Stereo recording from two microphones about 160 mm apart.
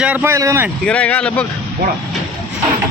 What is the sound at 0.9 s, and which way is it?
Speech, 10° left (ahead or behind).